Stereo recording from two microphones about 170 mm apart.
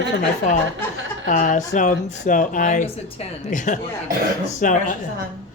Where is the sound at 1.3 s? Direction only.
50° left (ahead or behind).